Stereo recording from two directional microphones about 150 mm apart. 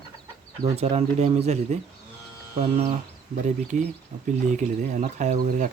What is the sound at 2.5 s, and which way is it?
Speech, 70° right (ahead or behind).